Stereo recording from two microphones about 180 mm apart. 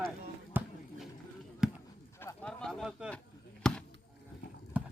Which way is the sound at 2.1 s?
10° left (ahead or behind).